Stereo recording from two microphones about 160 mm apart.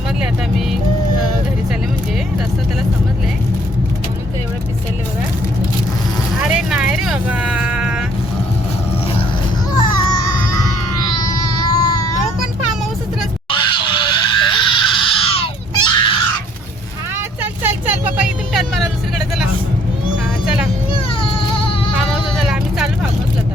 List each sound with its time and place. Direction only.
6.6 s vehicle: 5° right (ahead or behind)
9.8 s baby cry: 25° left (ahead or behind)
13.5 s screaming: 30° left (ahead or behind)
17.2 s vehicle: 15° right (ahead or behind)
20.4 s vehicle: 5° right (ahead or behind)
20.9 s baby cry: 35° left (ahead or behind)
22.4 s vehicle: 5° right (ahead or behind)